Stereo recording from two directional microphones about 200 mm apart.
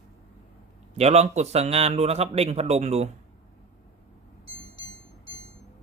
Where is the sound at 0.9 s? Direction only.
30° right (ahead or behind).